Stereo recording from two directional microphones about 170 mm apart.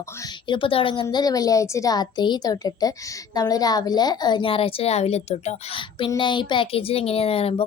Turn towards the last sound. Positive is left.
turn(degrees=35)  # may be behind; listen again after turning